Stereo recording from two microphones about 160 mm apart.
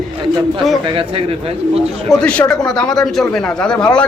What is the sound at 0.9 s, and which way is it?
Speech, 35° right (ahead or behind).